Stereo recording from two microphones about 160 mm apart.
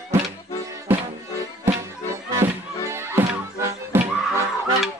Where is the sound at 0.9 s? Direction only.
15° right (ahead or behind).